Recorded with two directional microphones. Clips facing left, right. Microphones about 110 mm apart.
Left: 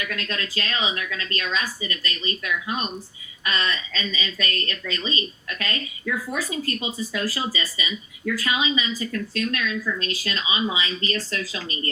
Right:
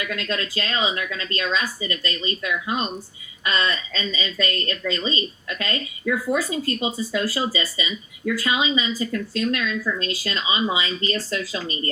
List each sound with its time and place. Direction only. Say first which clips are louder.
0.1 s speech: right 3 dB; 35° right (ahead or behind)